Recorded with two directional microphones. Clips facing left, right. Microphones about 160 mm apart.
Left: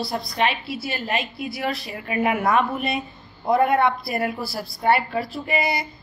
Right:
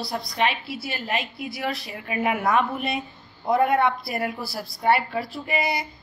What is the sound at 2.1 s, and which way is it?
A woman's voice, 55° left (ahead or behind).